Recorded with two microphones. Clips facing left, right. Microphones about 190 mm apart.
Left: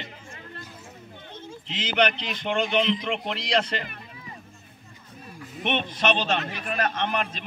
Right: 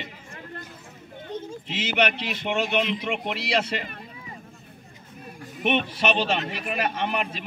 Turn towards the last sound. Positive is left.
turn(degrees=-10)  # may be behind; listen again after turning